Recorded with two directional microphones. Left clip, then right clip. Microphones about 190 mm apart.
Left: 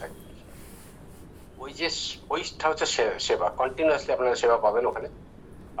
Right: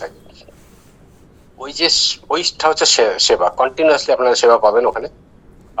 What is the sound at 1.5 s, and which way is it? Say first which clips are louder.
Speech: right 15 dB; 75° right (ahead or behind).